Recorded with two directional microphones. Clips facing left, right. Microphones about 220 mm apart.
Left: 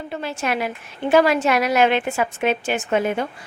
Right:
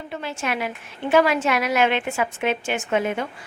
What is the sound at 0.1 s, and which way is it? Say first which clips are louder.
A woman's voice: left 3 dB; 40° left (ahead or behind).